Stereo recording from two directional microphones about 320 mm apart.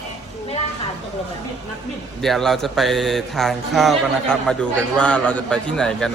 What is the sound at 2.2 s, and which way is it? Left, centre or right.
Speech, centre.